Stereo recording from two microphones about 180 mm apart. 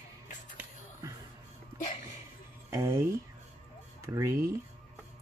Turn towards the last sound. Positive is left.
turn(degrees=-15)  # may be behind; listen again after turning